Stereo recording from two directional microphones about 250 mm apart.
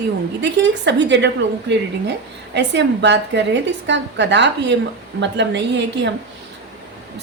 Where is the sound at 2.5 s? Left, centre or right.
Right.